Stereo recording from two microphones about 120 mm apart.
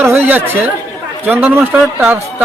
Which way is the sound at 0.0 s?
20° right (ahead or behind).